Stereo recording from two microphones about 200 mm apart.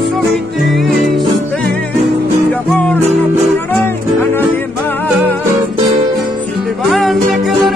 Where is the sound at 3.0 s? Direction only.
30° right (ahead or behind).